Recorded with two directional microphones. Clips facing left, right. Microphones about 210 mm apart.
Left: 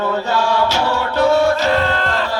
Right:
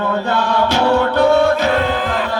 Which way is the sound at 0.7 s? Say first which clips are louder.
Right 5 dB; 55° right (ahead or behind).